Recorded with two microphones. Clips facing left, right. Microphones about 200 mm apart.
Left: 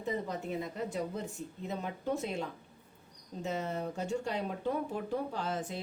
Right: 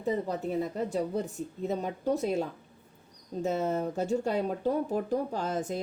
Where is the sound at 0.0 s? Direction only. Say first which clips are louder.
Right 5 dB; 35° right (ahead or behind).